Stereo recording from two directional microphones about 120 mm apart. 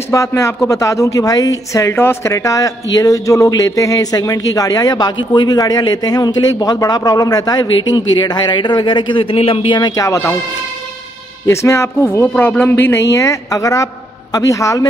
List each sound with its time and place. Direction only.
0.1 s speech: 25° left (ahead or behind)
11.4 s speech: 25° left (ahead or behind)